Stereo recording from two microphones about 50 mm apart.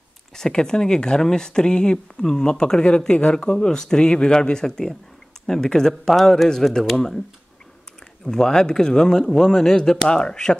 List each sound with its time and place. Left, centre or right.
0.4 s speech: centre
8.3 s speech: centre